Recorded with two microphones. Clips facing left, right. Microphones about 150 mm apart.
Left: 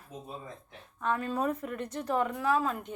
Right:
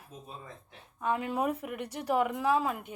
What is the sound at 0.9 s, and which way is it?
A woman's voice, 15° right (ahead or behind).